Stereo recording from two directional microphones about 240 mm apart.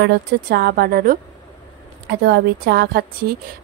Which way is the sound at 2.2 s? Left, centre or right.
Right.